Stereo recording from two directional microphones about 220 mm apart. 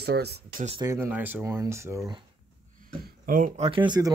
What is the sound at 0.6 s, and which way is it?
Speech, 25° right (ahead or behind).